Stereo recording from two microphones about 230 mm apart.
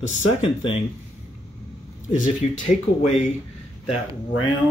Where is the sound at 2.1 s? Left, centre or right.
Left.